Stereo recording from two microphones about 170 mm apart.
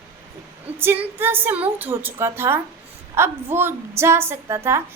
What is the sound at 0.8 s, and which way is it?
A woman's voice, 15° right (ahead or behind).